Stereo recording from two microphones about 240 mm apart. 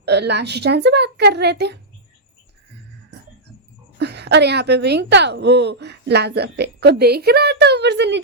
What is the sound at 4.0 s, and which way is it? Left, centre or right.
A woman's voice, right.